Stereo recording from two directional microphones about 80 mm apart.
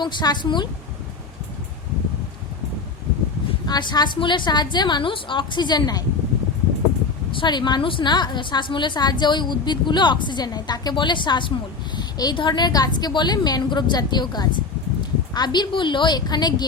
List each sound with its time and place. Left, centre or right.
0.0 s a woman's voice: left
3.7 s a woman's voice: left
7.3 s a woman's voice: left